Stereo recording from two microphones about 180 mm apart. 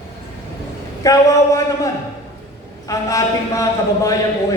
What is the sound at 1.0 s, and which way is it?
Speech, 20° left (ahead or behind).